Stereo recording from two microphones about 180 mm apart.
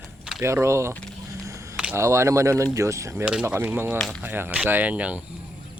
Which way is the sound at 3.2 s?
5° right (ahead or behind).